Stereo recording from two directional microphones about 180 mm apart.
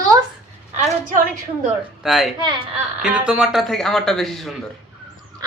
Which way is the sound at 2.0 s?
Centre (ahead or behind).